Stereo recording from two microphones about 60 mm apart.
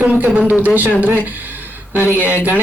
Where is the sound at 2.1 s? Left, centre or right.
Right.